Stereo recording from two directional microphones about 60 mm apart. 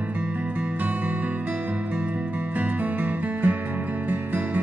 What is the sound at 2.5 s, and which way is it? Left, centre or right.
Music, right.